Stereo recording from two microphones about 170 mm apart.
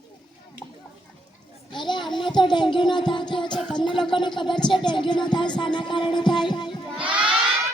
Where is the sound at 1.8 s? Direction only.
25° left (ahead or behind).